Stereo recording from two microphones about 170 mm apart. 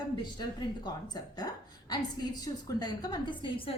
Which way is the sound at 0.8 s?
25° left (ahead or behind).